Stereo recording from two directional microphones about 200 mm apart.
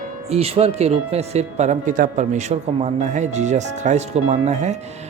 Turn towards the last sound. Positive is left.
turn(degrees=-35)  # may be behind; listen again after turning